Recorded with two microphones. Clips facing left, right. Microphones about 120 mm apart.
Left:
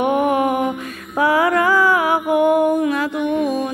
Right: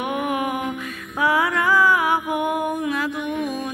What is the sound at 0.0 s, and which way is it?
Music, 35° left (ahead or behind).